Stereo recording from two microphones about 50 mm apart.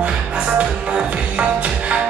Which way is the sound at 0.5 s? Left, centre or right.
Right.